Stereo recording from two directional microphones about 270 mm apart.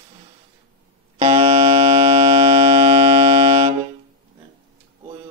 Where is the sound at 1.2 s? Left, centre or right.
Right.